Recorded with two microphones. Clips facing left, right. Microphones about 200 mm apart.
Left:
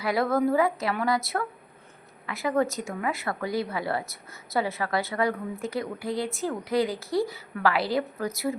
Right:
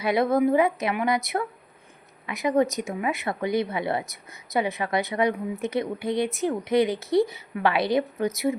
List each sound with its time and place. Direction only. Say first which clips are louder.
0.0 s speech: right 3 dB; 20° right (ahead or behind)